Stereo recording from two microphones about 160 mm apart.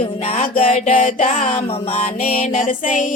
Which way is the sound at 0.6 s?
50° left (ahead or behind).